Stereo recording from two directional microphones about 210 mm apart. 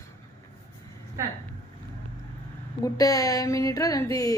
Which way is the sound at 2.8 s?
15° left (ahead or behind).